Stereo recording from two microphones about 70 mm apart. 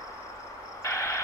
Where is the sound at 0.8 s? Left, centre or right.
Left.